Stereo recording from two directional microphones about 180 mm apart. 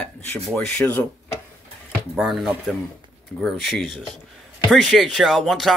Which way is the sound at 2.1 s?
Centre (ahead or behind).